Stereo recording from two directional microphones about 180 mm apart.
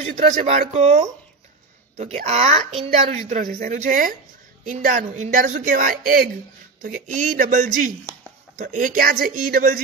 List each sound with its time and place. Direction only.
0.0 s speech: 45° right (ahead or behind)